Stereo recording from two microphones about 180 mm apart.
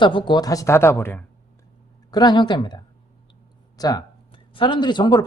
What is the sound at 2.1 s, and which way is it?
Speech, 25° left (ahead or behind).